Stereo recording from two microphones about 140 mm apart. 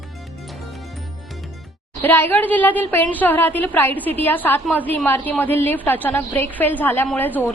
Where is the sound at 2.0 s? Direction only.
15° left (ahead or behind).